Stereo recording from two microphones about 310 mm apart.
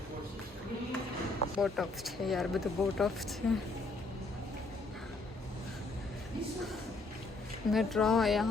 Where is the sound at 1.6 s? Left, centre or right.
Centre.